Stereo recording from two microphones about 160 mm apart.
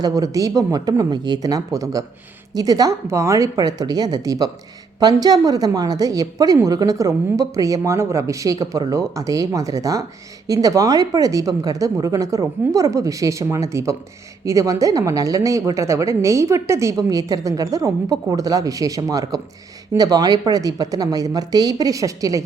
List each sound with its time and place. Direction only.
0.0 s a woman's voice: 20° right (ahead or behind)